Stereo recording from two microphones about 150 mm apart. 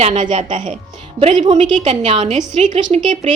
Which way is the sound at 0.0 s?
35° right (ahead or behind).